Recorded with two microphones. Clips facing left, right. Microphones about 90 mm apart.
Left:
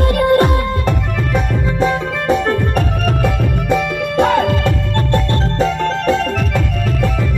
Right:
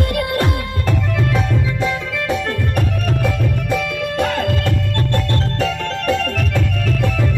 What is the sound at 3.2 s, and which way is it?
Music, 30° left (ahead or behind).